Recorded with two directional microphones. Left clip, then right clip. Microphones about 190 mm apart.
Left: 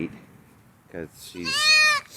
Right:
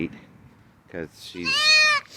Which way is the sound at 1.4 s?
55° right (ahead or behind).